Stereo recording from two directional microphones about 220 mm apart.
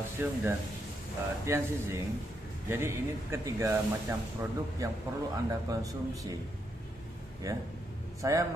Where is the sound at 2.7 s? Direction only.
10° right (ahead or behind).